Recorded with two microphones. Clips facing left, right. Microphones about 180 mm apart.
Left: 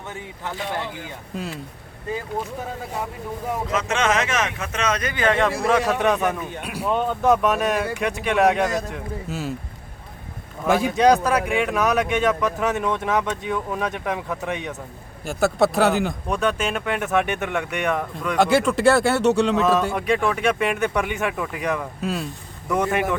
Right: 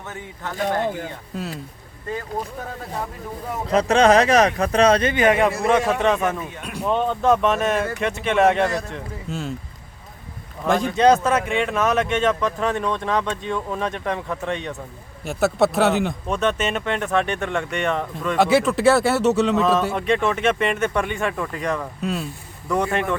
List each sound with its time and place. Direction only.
0.5 s speech: 45° right (ahead or behind)
3.7 s speech: 35° right (ahead or behind); by 5.5 s 15° right (ahead or behind)
5.5 s speech: centre (ahead or behind)
10.7 s speech: 5° left (ahead or behind)
17.8 s speech: centre (ahead or behind)